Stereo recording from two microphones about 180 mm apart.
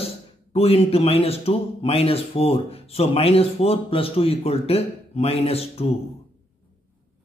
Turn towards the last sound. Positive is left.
turn(degrees=35)  # may be behind; listen again after turning